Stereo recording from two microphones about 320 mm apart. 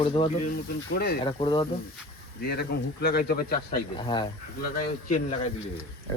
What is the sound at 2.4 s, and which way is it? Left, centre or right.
Speech, left.